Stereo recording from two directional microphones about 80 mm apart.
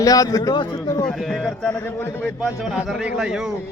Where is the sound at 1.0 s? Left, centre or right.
Centre.